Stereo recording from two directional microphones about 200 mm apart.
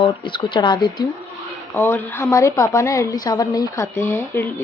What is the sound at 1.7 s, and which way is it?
A woman's voice, 10° left (ahead or behind).